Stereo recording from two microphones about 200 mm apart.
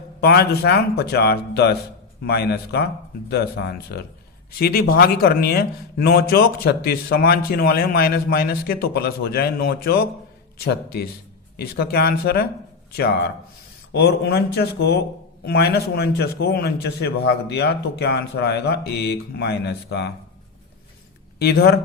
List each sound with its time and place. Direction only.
0.2 s speech: 55° left (ahead or behind)
13.9 s a man's voice: 55° left (ahead or behind)
21.3 s speech: 55° left (ahead or behind)